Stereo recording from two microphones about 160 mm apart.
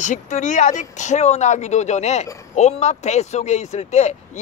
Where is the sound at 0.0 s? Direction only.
50° left (ahead or behind).